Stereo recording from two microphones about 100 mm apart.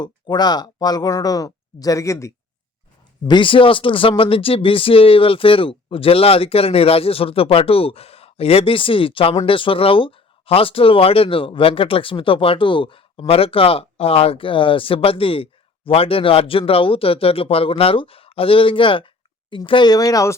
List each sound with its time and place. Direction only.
0.0 s speech: 45° left (ahead or behind); by 2.3 s 30° left (ahead or behind)
3.2 s speech: 55° left (ahead or behind); by 20.3 s 35° left (ahead or behind)